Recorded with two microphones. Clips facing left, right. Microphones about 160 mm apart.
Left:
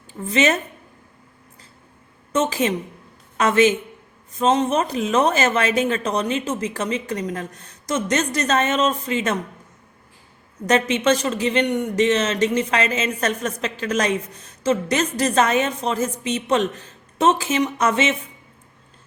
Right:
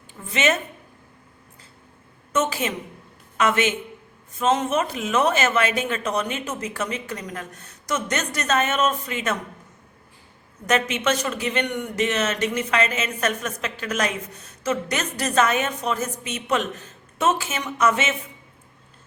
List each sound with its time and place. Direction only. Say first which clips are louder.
0.1 s a woman's voice: left 4 dB; 35° left (ahead or behind)
2.3 s speech: left 3 dB; 30° left (ahead or behind)
10.7 s speech: left 4 dB; 30° left (ahead or behind)